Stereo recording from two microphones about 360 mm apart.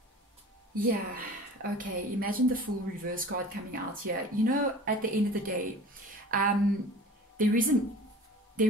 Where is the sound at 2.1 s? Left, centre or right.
Right.